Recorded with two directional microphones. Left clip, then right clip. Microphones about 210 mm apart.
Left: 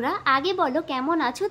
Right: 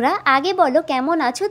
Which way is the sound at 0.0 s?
25° right (ahead or behind).